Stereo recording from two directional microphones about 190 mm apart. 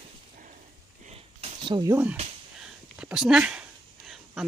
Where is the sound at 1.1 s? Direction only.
30° right (ahead or behind).